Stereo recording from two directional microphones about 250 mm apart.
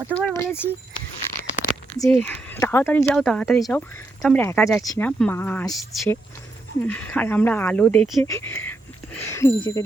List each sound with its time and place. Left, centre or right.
0.1 s speech: centre
2.0 s speech: centre
8.3 s speech: centre